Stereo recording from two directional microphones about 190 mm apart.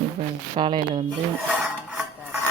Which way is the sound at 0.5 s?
25° right (ahead or behind).